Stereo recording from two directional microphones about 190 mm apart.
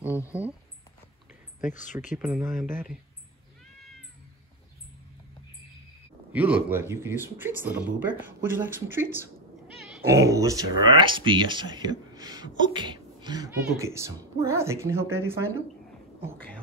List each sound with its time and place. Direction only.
1.8 s speech: 40° left (ahead or behind)
2.1 s speech: 10° right (ahead or behind)
6.3 s speech: 10° right (ahead or behind)